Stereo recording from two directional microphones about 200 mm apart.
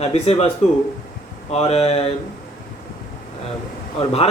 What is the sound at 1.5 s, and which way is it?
Speech, 30° left (ahead or behind).